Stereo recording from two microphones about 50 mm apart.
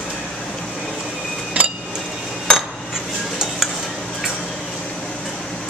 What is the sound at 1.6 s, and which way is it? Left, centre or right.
Chink, right.